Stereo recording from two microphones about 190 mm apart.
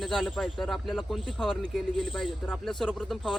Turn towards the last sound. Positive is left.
turn(degrees=0)  # may be behind; listen again after turning